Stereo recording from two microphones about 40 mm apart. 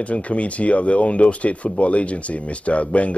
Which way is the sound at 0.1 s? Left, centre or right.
Left.